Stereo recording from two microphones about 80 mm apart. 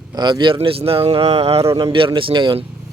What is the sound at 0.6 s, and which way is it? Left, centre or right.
Speech, right.